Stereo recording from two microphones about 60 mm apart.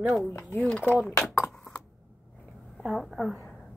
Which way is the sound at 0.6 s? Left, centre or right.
Centre.